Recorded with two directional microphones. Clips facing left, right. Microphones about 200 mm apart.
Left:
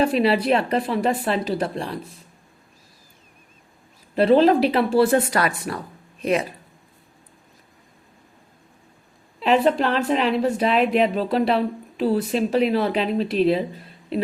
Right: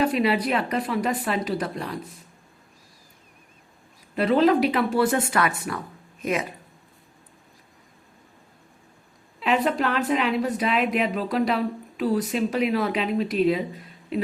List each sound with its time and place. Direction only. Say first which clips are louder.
0.0 s speech: left 3 dB; 30° left (ahead or behind)
4.1 s speech: left 4 dB; 30° left (ahead or behind)
9.4 s speech: left 4 dB; 30° left (ahead or behind)